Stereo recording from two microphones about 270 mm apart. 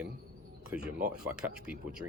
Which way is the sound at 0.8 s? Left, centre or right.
Right.